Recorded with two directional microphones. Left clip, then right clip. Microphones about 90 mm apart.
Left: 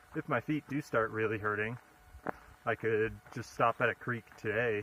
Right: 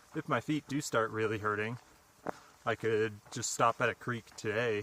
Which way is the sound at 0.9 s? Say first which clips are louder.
Even; 45° right (ahead or behind).